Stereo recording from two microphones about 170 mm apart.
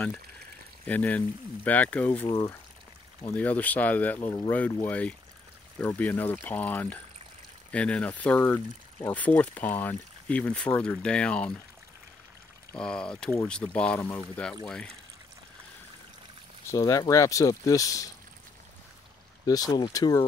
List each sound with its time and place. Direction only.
0.8 s speech: 10° left (ahead or behind)
12.8 s speech: 5° left (ahead or behind)
16.6 s speech: 20° left (ahead or behind)
19.4 s speech: 20° left (ahead or behind)